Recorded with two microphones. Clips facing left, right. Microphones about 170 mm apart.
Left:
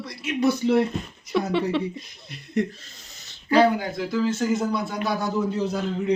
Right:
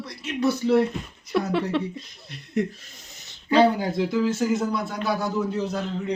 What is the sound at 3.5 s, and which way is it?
Speech, 25° right (ahead or behind).